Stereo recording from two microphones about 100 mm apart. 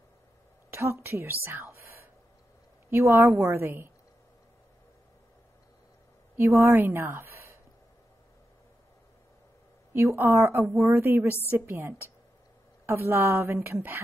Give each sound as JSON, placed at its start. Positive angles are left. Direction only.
{"t": 0.7, "sound": "a woman's voice", "side_deg": -25}
{"t": 6.3, "sound": "a woman's voice", "side_deg": -25}
{"t": 9.9, "sound": "a woman's voice", "side_deg": -25}